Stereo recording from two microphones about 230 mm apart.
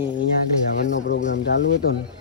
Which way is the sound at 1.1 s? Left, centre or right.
Left.